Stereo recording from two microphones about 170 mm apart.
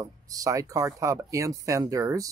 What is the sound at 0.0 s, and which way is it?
Speech, 20° right (ahead or behind).